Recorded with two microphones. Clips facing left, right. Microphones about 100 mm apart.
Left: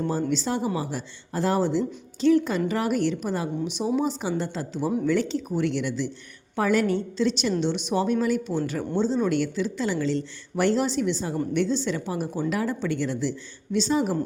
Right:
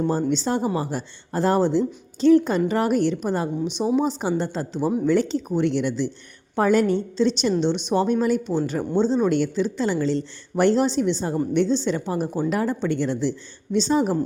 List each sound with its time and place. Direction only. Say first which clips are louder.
0.2 s a woman's voice: right 3 dB; 35° right (ahead or behind)
3.8 s a woman's voice: right 4 dB; 25° right (ahead or behind)
4.9 s a woman's voice: right 3 dB; 20° right (ahead or behind)
5.1 s a woman's voice: right 4 dB; 35° right (ahead or behind)